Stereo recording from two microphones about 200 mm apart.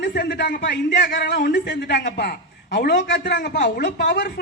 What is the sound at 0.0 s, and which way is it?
A man's voice, 55° left (ahead or behind).